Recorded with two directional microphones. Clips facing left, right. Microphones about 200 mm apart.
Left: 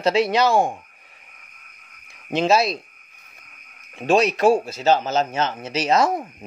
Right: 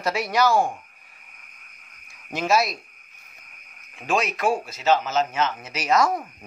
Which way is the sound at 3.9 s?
30° left (ahead or behind).